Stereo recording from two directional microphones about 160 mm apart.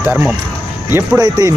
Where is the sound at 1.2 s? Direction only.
25° right (ahead or behind).